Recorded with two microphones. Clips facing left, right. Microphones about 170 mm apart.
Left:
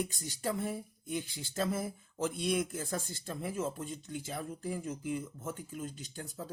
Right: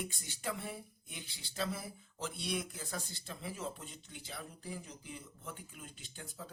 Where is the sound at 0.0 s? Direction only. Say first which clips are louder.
Left 6 dB; 40° left (ahead or behind).